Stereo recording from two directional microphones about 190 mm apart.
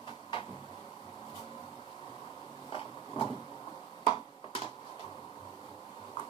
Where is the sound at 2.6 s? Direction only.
30° left (ahead or behind).